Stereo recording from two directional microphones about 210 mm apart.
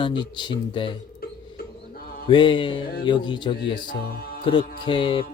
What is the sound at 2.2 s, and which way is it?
Music, 25° left (ahead or behind).